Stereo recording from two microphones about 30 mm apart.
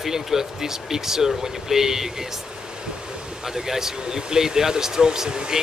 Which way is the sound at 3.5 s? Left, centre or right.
Centre.